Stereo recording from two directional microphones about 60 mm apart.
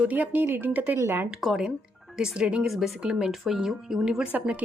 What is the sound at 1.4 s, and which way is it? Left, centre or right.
Speech, centre.